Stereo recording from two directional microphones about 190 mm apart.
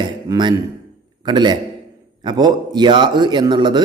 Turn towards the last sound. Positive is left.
turn(degrees=-25)  # may be behind; listen again after turning